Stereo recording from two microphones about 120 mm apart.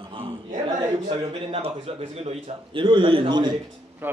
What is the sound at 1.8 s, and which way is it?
Speech, 60° right (ahead or behind).